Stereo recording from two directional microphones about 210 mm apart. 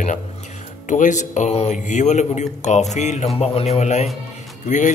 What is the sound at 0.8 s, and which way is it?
A man's voice, 35° left (ahead or behind).